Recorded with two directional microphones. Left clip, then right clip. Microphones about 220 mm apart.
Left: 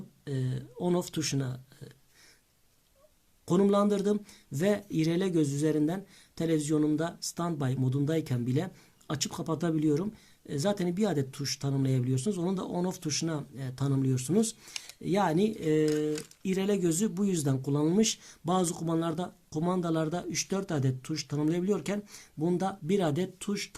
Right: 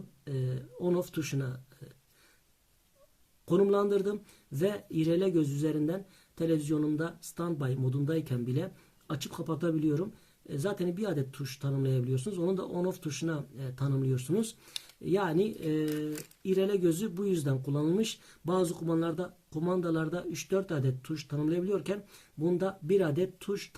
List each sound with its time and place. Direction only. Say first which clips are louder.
0.8 s speech: left 1 dB; 30° left (ahead or behind)
3.4 s speech: even; 30° left (ahead or behind)